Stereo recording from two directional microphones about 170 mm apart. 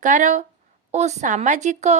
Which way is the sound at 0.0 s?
45° right (ahead or behind).